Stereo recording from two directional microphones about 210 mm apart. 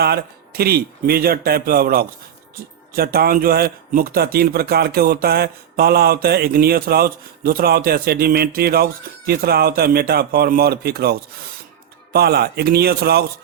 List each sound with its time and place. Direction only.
0.0 s a man's voice: 50° right (ahead or behind)